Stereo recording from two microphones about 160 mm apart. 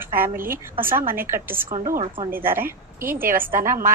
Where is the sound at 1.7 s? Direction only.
55° right (ahead or behind).